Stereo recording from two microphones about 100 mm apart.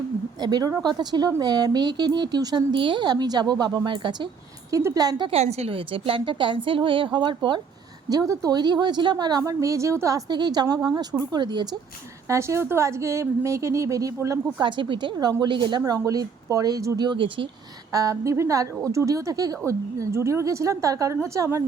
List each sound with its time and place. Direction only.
0.3 s a woman's voice: 45° right (ahead or behind)
2.7 s a woman's voice: 55° right (ahead or behind)
4.7 s a woman's voice: 30° right (ahead or behind)
5.0 s a woman's voice: 50° right (ahead or behind)
5.3 s a woman's voice: 90° right; by 7.6 s 50° right (ahead or behind)
8.1 s a woman's voice: 35° right (ahead or behind)
9.4 s a woman's voice: 35° right (ahead or behind)
10.3 s a woman's voice: 45° right (ahead or behind)
12.3 s a woman's voice: 30° right (ahead or behind)
14.6 s a woman's voice: 50° right (ahead or behind)
15.9 s a woman's voice: 35° right (ahead or behind)
17.0 s a woman's voice: 50° right (ahead or behind)
17.9 s a woman's voice: 35° right (ahead or behind)